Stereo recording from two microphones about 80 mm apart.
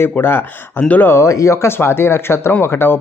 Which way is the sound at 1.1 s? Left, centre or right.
Left.